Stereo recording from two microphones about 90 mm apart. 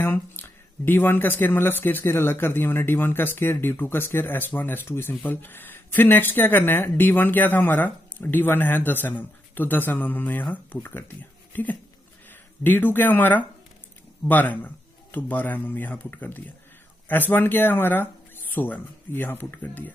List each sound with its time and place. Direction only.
0.0 s speech: 25° left (ahead or behind)